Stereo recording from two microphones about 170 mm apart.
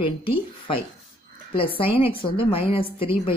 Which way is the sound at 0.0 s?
30° left (ahead or behind).